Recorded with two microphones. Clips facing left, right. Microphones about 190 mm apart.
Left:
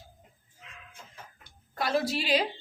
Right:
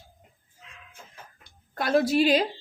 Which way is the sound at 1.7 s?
50° right (ahead or behind).